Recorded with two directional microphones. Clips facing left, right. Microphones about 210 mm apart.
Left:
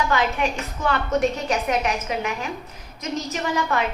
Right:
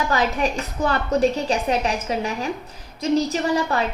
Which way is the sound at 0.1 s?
35° right (ahead or behind).